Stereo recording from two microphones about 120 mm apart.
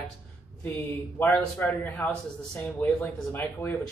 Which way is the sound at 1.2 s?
10° left (ahead or behind).